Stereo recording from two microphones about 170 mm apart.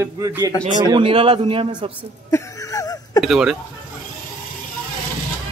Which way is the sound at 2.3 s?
20° left (ahead or behind).